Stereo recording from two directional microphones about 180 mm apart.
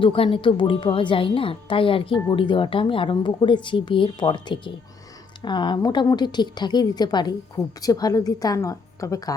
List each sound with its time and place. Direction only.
0.0 s a woman's voice: 30° left (ahead or behind)